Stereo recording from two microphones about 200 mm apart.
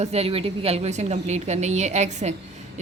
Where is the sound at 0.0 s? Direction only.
30° right (ahead or behind).